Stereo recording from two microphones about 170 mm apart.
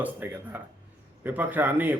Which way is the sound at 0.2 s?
10° right (ahead or behind).